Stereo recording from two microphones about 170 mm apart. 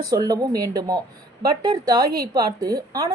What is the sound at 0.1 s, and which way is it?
A woman's voice, 20° right (ahead or behind).